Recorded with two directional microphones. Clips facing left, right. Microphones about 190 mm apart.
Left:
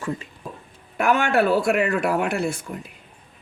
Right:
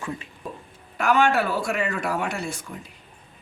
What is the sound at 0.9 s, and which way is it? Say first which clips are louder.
Speech: left 1 dB; 55° left (ahead or behind).